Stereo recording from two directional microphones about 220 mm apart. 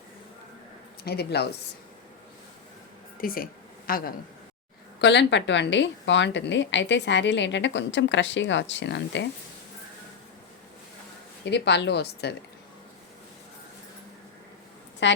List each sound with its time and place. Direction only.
1.0 s a woman's voice: 45° left (ahead or behind)
3.2 s a sound: 40° left (ahead or behind)
4.9 s a woman's voice: 50° left (ahead or behind)
11.4 s a woman's voice: 50° left (ahead or behind)
15.0 s a woman's voice: 55° left (ahead or behind)